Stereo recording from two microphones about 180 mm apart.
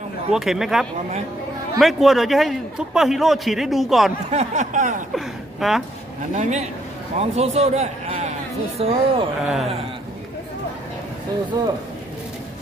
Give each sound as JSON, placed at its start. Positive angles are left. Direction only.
{"t": 0.3, "sound": "a man's voice", "side_deg": 0}
{"t": 4.3, "sound": "a sound", "side_deg": -40}
{"t": 5.1, "sound": "speech", "side_deg": 0}
{"t": 6.3, "sound": "a man's voice", "side_deg": -40}
{"t": 11.6, "sound": "speech", "side_deg": -20}